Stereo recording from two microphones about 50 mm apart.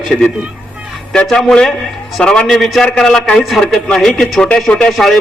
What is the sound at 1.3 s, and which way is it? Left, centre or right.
A man's voice, centre.